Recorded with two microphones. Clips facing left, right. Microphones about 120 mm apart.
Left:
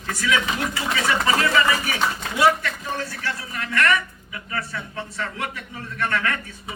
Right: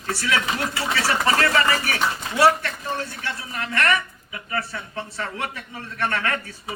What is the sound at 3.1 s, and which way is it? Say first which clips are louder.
A man's voice: left 1 dB; 25° right (ahead or behind).